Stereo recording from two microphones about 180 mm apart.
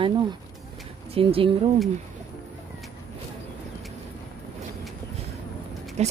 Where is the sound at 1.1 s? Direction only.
30° right (ahead or behind).